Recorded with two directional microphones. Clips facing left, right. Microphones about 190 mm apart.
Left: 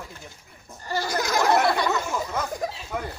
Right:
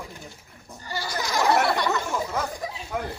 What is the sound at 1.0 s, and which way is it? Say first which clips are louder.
Speech: left 4 dB; 45° left (ahead or behind).